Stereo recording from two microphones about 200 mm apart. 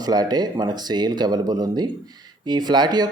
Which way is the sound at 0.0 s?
20° right (ahead or behind).